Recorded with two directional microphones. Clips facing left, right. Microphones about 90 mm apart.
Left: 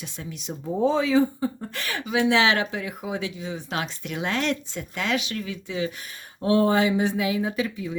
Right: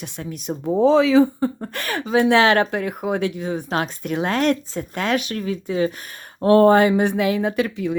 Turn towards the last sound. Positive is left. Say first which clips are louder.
# right 6 dB
turn(degrees=-65)  # may be behind; listen again after turning